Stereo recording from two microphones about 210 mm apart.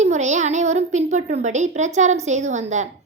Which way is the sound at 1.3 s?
35° right (ahead or behind).